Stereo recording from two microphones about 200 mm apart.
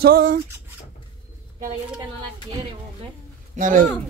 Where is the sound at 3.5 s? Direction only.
40° right (ahead or behind).